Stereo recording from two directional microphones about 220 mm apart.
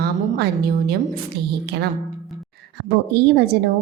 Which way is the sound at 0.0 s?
45° right (ahead or behind).